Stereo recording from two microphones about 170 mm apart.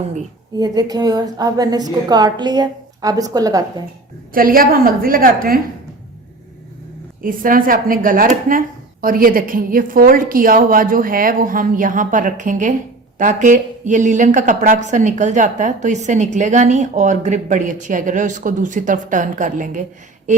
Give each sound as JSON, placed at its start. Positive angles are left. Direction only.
{"t": 0.6, "sound": "a woman's voice", "side_deg": -25}
{"t": 4.4, "sound": "speech", "side_deg": -55}
{"t": 7.2, "sound": "a woman's voice", "side_deg": -55}